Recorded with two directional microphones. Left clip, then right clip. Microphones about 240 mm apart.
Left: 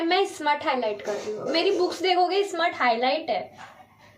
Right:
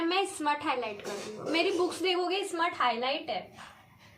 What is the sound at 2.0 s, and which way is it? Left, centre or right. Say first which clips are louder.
Speech: left 8 dB; centre.